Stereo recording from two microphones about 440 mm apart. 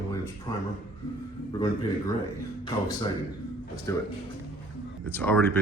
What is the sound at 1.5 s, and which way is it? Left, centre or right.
Speech, centre.